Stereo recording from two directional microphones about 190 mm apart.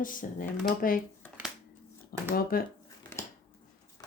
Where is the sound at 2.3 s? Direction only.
50° left (ahead or behind).